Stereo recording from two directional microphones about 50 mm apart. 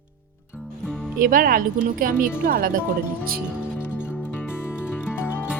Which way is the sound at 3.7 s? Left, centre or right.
Left.